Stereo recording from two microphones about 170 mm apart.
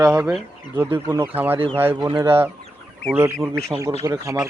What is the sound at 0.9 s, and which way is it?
Speech, 15° right (ahead or behind).